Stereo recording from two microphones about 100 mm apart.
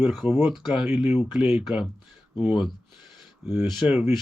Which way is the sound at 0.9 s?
15° right (ahead or behind).